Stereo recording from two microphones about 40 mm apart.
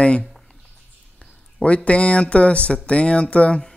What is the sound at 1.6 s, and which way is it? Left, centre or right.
Speech, left.